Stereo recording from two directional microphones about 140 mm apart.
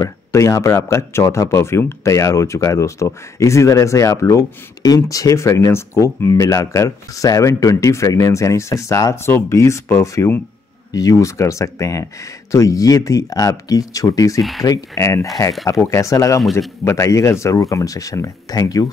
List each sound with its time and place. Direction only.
0.0 s speech: 20° left (ahead or behind)